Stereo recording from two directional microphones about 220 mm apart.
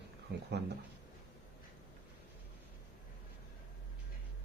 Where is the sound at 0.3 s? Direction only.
45° right (ahead or behind).